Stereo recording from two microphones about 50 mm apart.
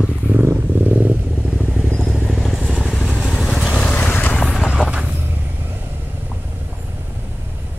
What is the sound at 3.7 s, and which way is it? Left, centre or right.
Boat, left.